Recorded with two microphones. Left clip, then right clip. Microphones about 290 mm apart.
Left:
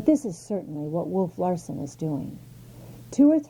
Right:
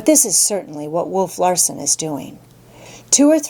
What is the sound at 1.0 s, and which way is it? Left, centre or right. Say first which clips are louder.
Speech: right 9 dB; right.